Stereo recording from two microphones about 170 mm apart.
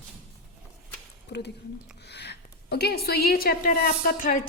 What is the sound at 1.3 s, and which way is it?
A woman's voice, 80° left.